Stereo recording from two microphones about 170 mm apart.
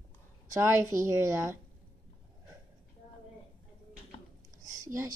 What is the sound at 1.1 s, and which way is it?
Speech, 15° right (ahead or behind).